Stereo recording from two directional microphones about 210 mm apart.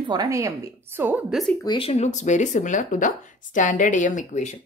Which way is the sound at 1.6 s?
25° left (ahead or behind).